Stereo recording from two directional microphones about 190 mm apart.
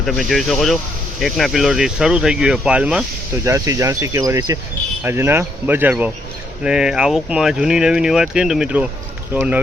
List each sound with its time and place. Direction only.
0.0 s speech: centre (ahead or behind)
3.4 s speech: 15° right (ahead or behind)